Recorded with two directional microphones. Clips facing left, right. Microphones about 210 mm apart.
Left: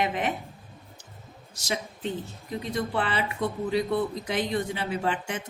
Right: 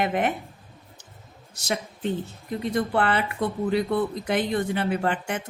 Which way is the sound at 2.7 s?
55° right (ahead or behind).